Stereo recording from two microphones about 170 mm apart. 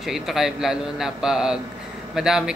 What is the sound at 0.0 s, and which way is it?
Speech, centre (ahead or behind).